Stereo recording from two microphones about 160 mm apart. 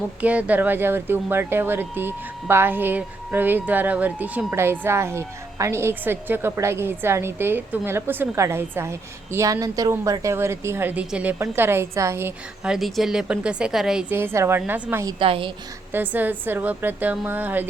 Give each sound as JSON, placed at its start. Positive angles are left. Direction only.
{"t": 0.2, "sound": "speech", "side_deg": -10}
{"t": 12.7, "sound": "a woman's voice", "side_deg": 0}
{"t": 14.2, "sound": "speech", "side_deg": -15}
{"t": 15.2, "sound": "a woman's voice", "side_deg": -35}
{"t": 15.9, "sound": "speech", "side_deg": -10}